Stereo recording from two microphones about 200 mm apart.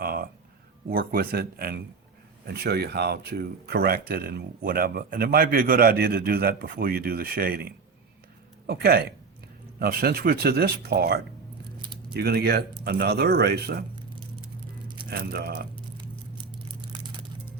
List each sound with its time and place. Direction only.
0.0 s a sound: 50° right (ahead or behind)
0.9 s speech: 45° right (ahead or behind)
15.1 s speech: 50° right (ahead or behind)